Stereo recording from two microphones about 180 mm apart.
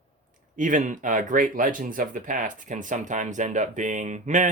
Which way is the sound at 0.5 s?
45° right (ahead or behind).